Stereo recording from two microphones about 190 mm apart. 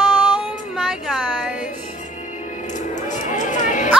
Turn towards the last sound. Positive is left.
turn(degrees=40)  # may be behind; listen again after turning